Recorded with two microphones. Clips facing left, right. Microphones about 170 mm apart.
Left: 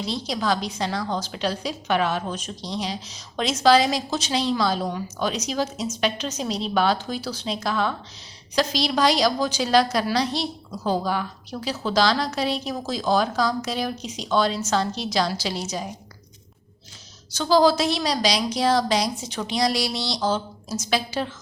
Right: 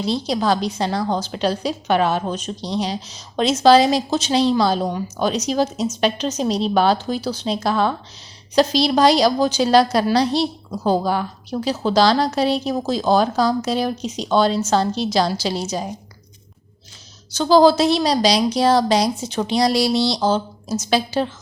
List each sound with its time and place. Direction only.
0.0 s a woman's voice: 30° right (ahead or behind)
17.3 s a woman's voice: 30° right (ahead or behind)